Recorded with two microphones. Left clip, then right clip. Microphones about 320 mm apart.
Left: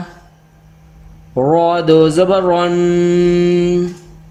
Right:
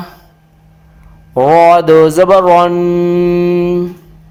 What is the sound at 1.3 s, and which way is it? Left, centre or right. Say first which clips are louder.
Speech: right 6 dB; right.